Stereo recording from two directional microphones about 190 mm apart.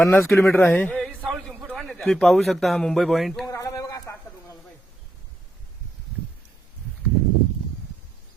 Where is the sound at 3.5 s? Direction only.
15° left (ahead or behind).